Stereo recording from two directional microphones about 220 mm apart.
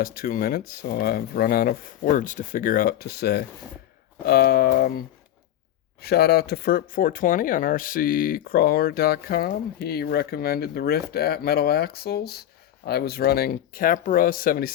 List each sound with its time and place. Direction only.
0.0 s speech: 40° left (ahead or behind)